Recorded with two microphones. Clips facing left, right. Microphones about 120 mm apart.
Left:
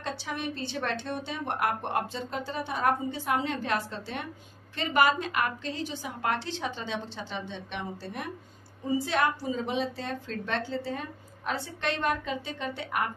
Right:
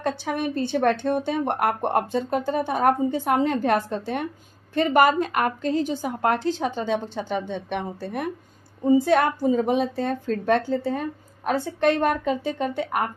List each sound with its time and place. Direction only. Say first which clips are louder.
0.0 s a woman's voice: right 8 dB; 50° right (ahead or behind)